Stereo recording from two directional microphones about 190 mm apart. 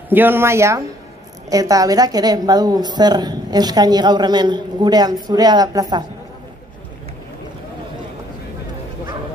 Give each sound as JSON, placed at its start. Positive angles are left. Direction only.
{"t": 0.1, "sound": "a woman's voice", "side_deg": -10}